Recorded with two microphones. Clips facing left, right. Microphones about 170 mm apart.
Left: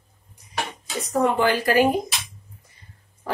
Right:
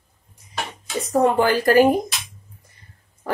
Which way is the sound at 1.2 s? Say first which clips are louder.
Right 3 dB; 40° right (ahead or behind).